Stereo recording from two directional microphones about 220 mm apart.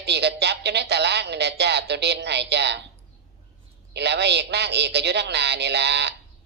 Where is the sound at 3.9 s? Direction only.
50° right (ahead or behind).